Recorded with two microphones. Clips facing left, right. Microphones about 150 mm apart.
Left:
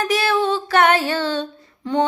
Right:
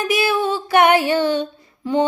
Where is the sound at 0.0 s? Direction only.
10° right (ahead or behind).